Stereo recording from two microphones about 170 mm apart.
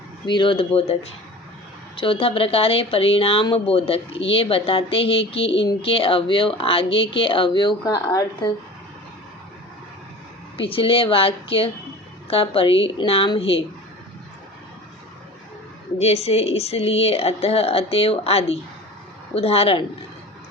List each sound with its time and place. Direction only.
0.3 s speech: 30° left (ahead or behind)
2.0 s speech: 30° left (ahead or behind)
10.6 s speech: 30° left (ahead or behind)
16.0 s speech: 40° left (ahead or behind)